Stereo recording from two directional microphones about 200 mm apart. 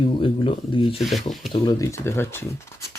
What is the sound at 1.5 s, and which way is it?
Speech, 20° left (ahead or behind).